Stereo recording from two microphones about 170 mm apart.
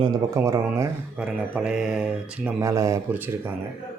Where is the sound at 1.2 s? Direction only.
5° right (ahead or behind).